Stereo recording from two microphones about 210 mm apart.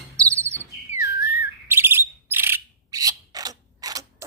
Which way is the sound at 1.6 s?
10° right (ahead or behind).